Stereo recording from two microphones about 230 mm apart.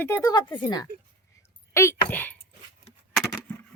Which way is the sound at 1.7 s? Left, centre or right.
Centre.